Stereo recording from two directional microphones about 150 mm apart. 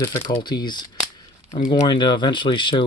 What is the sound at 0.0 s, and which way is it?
Speech, 25° left (ahead or behind).